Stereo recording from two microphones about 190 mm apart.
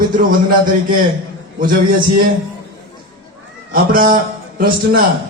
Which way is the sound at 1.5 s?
45° right (ahead or behind).